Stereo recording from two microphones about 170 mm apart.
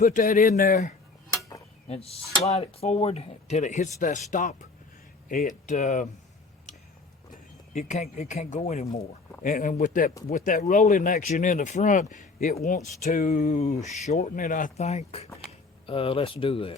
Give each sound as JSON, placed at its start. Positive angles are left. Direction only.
{"t": 0.0, "sound": "speech", "side_deg": 50}
{"t": 1.9, "sound": "speech", "side_deg": 35}
{"t": 7.7, "sound": "speech", "side_deg": 45}
{"t": 9.4, "sound": "speech", "side_deg": 50}